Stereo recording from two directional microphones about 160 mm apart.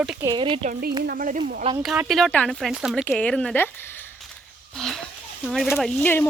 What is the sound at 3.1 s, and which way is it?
Speech, 10° left (ahead or behind).